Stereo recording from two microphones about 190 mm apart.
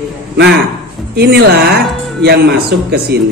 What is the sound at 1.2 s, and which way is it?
Speech, 55° right (ahead or behind).